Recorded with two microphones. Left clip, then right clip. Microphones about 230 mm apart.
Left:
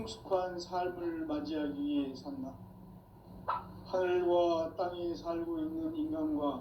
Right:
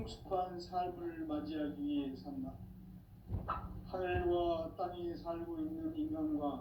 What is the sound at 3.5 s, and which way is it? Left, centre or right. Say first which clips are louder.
A man's voice: left 7 dB; left.